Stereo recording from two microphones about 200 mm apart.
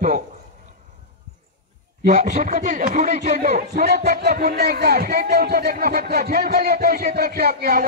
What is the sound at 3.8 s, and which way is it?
Speech, 55° right (ahead or behind).